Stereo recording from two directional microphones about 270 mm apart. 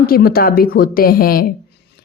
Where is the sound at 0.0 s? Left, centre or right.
Left.